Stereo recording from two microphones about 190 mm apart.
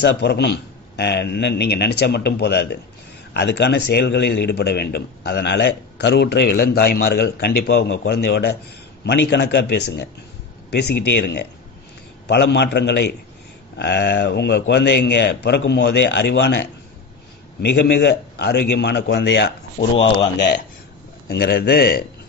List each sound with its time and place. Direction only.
0.0 s a man's voice: 65° left (ahead or behind)
17.6 s a man's voice: 60° left (ahead or behind)
19.8 s speech: 30° left (ahead or behind)
20.3 s speech: 65° left (ahead or behind)
21.3 s a man's voice: 55° left (ahead or behind)